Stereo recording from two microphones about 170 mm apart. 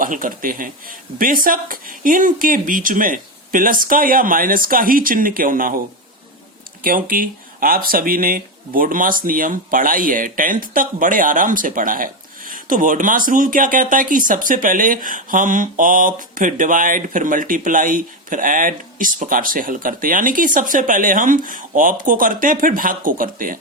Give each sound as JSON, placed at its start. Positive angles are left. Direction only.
{"t": 0.0, "sound": "speech", "side_deg": -55}
{"t": 6.8, "sound": "speech", "side_deg": -55}